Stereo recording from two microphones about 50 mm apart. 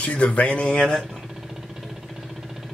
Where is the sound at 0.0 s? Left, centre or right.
Left.